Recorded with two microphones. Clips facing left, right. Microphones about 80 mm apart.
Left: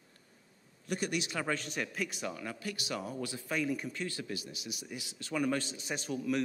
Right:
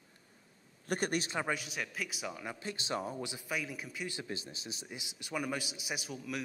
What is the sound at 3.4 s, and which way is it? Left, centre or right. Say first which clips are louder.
Speech: left 8 dB; centre.